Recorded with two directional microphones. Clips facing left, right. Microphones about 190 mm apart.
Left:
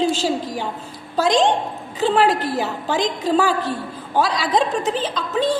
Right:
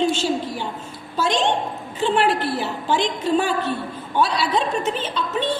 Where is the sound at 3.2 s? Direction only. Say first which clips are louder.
Left 2 dB; 90° left.